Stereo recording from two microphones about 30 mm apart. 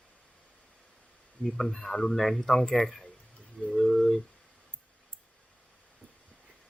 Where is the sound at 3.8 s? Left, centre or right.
Left.